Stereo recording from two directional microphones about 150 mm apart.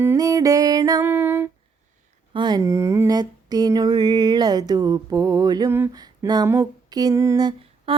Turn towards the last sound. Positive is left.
turn(degrees=-30)  # may be behind; listen again after turning